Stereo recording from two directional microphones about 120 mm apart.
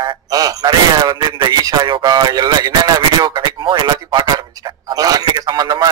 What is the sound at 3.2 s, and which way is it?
Radio, 30° right (ahead or behind).